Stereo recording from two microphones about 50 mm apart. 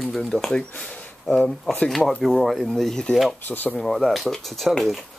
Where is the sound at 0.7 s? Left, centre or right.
Left.